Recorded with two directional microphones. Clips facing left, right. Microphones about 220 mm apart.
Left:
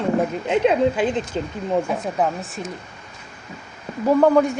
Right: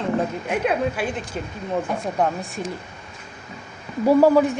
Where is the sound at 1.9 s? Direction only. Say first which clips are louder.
Left 1 dB; 5° left (ahead or behind).